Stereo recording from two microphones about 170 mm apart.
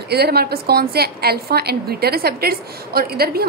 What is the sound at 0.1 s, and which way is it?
A woman's voice, 70° right (ahead or behind).